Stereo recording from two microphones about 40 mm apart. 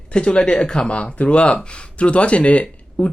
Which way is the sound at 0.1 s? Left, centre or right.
Left.